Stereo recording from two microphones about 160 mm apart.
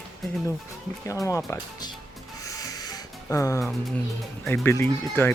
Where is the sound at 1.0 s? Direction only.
20° left (ahead or behind).